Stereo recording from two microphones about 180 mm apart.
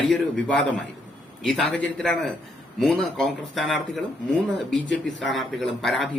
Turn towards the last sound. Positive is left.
turn(degrees=0)  # may be behind; listen again after turning